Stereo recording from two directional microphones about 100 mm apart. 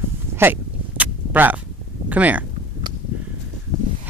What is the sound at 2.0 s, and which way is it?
Speech, 15° right (ahead or behind).